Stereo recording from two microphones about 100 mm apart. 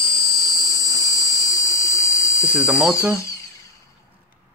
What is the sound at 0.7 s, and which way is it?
Dental drill, 35° left (ahead or behind).